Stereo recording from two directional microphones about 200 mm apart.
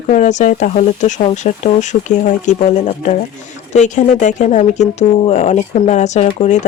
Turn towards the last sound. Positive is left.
turn(degrees=35)  # may be behind; listen again after turning